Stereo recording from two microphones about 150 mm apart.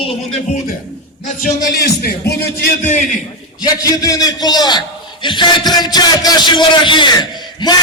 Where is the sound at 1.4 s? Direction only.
90° left.